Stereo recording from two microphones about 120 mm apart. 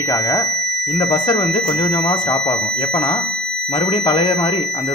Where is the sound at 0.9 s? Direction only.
40° left (ahead or behind).